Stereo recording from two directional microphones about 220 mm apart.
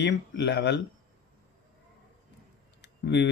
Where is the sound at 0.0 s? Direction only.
50° left (ahead or behind).